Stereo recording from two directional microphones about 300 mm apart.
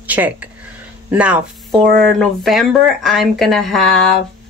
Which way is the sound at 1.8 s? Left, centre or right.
Right.